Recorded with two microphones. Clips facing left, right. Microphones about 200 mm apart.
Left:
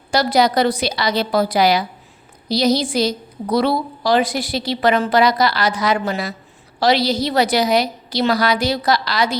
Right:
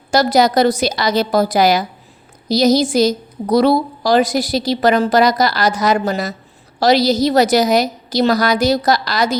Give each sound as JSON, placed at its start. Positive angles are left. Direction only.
{"t": 0.1, "sound": "a woman's voice", "side_deg": -45}